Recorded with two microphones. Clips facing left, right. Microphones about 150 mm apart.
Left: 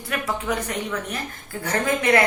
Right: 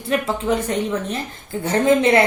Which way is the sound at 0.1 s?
25° right (ahead or behind).